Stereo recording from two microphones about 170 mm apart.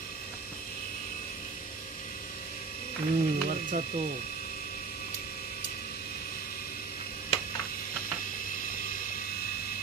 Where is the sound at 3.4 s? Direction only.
50° right (ahead or behind).